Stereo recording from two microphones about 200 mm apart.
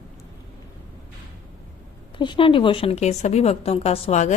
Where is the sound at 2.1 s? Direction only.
25° left (ahead or behind).